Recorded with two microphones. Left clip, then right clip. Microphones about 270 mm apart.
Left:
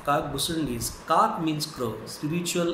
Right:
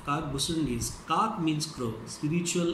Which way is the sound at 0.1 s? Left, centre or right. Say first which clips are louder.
Left 5 dB; centre.